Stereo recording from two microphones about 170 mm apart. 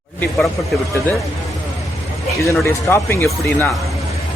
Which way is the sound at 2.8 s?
15° left (ahead or behind).